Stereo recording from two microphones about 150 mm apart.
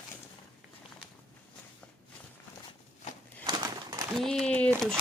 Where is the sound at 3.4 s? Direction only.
25° right (ahead or behind).